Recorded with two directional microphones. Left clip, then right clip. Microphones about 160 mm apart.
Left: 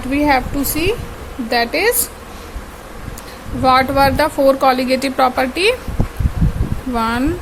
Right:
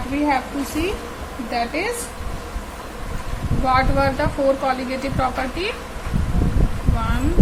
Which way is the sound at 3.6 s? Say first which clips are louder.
Left 6 dB; 90° left.